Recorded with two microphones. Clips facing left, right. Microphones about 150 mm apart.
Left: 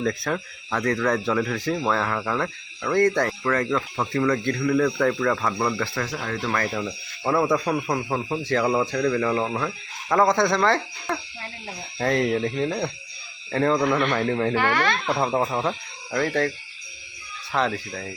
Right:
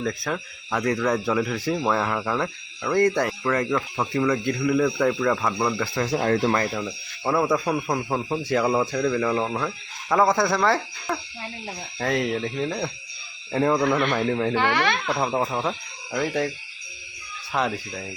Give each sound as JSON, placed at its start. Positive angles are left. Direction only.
{"t": 0.0, "sound": "speech", "side_deg": 0}
{"t": 6.1, "sound": "speech", "side_deg": -50}
{"t": 6.4, "sound": "speech", "side_deg": -25}
{"t": 6.7, "sound": "speech", "side_deg": -5}
{"t": 13.5, "sound": "speech", "side_deg": -10}
{"t": 14.5, "sound": "speech", "side_deg": -20}
{"t": 15.2, "sound": "speech", "side_deg": 0}
{"t": 17.5, "sound": "speech", "side_deg": -10}